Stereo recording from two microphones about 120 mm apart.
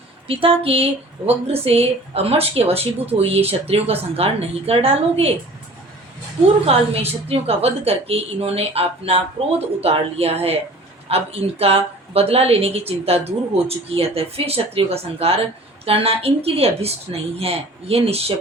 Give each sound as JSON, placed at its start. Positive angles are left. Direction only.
{"t": 0.3, "sound": "a sound", "side_deg": -50}
{"t": 1.3, "sound": "a woman's voice", "side_deg": -55}
{"t": 6.7, "sound": "a woman's voice", "side_deg": -55}